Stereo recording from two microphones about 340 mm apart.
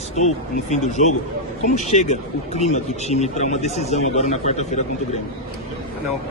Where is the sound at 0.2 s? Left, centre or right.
Centre.